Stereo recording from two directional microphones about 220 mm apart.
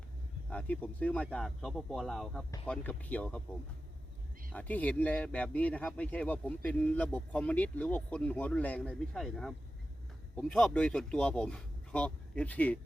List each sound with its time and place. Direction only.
0.5 s speech: 5° left (ahead or behind)
4.5 s speech: 5° left (ahead or behind)